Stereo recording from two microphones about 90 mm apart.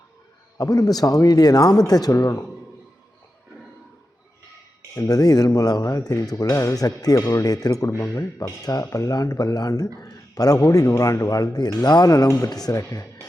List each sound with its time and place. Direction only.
0.6 s speech: 45° left (ahead or behind)
4.9 s speech: 45° left (ahead or behind)